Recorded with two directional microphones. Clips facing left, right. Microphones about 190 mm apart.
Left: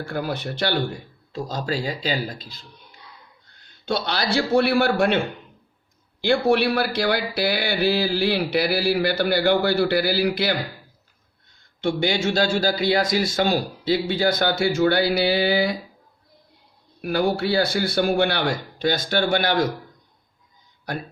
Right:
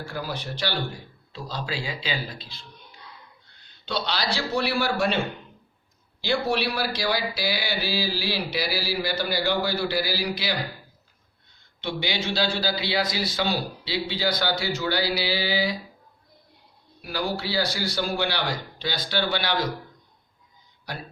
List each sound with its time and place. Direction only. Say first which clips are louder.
0.0 s a man's voice: left 5 dB; 55° left (ahead or behind)
6.2 s speech: left 6 dB; 55° left (ahead or behind)
11.8 s a man's voice: left 7 dB; 50° left (ahead or behind)
17.0 s a man's voice: left 7 dB; 55° left (ahead or behind)